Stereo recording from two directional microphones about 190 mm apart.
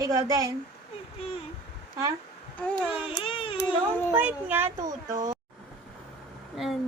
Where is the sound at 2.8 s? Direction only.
30° left (ahead or behind).